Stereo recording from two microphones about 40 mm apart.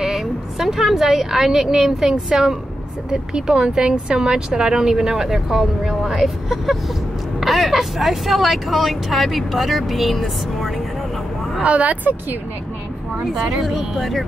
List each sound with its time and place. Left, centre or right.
0.0 s a woman's voice: centre
3.1 s a woman's voice: centre
11.6 s speech: right
13.3 s a woman's voice: centre